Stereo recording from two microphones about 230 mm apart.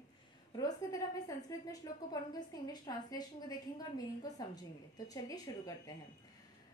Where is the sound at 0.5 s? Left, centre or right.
Centre.